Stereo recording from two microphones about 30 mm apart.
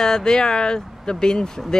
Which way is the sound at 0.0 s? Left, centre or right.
Left.